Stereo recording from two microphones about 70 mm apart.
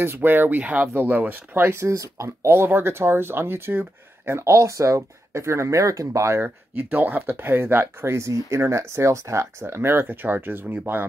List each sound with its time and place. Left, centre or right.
0.0 s speech: right
2.4 s speech: right